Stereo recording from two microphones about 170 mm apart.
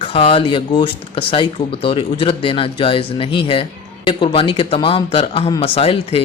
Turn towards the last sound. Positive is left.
turn(degrees=35)  # may be behind; listen again after turning